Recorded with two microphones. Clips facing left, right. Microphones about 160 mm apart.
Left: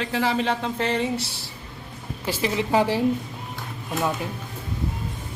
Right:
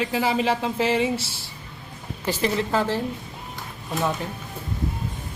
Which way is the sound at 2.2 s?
10° left (ahead or behind).